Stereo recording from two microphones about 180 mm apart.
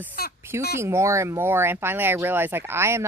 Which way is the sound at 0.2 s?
55° left (ahead or behind).